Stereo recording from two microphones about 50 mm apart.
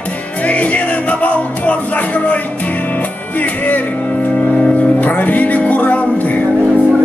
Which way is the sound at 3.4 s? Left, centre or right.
Left.